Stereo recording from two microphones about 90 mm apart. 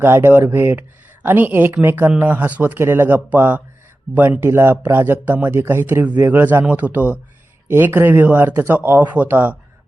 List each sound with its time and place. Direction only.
0.0 s speech: 25° right (ahead or behind)